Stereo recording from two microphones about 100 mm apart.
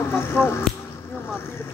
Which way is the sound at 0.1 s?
25° left (ahead or behind).